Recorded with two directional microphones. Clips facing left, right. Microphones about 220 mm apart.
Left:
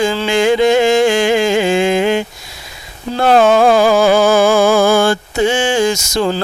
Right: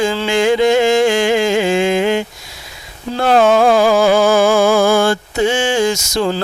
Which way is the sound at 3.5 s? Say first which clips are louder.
Left 1 dB; 40° left (ahead or behind).